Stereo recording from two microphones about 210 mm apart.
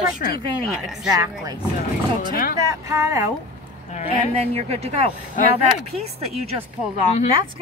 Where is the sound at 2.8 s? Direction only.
15° right (ahead or behind).